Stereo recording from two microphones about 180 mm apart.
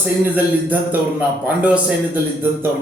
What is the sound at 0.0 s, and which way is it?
A man's voice, 10° right (ahead or behind).